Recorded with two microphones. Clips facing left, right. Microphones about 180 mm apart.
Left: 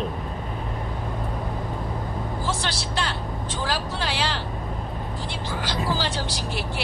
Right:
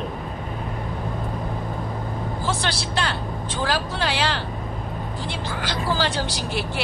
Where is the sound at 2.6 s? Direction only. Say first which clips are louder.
Right 3 dB; 65° right (ahead or behind).